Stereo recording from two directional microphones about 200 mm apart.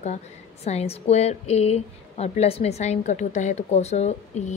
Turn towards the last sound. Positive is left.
turn(degrees=35)  # may be behind; listen again after turning